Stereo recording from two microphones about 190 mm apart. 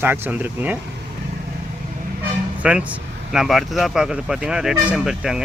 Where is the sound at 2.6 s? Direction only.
5° right (ahead or behind).